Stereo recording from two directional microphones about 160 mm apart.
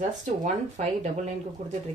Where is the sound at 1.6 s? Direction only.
40° right (ahead or behind).